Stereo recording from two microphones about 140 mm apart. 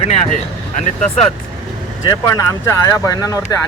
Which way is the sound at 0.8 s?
55° left (ahead or behind).